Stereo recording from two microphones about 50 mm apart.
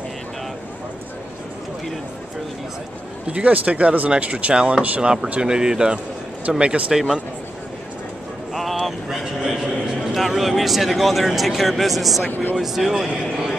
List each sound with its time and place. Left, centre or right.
3.3 s speech: right
5.4 s a man's voice: centre
8.5 s a sound: centre
12.5 s a man's voice: centre